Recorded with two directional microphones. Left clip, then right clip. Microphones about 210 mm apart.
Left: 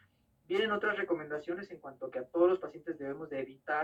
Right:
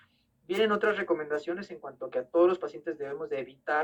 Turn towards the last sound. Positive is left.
turn(degrees=-50)  # may be behind; listen again after turning